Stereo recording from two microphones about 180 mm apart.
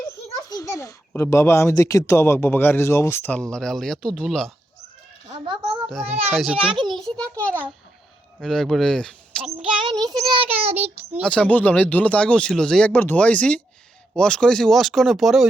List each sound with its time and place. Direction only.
0.4 s a child's voice: 20° left (ahead or behind); by 4.5 s centre (ahead or behind)
6.1 s a child's voice: 35° right (ahead or behind)
6.3 s speech: centre (ahead or behind)
6.6 s a child's voice: 30° right (ahead or behind)
6.9 s a child's voice: 5° left (ahead or behind)
10.1 s a child's voice: 30° right (ahead or behind)
11.2 s a child's voice: 5° left (ahead or behind)